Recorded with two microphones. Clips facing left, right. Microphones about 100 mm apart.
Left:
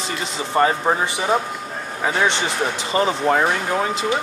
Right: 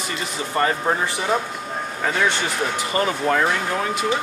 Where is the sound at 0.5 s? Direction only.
20° left (ahead or behind).